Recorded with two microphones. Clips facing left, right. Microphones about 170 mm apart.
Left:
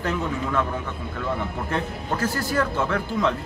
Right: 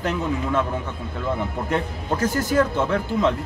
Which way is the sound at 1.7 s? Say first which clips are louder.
Right 3 dB; 20° right (ahead or behind).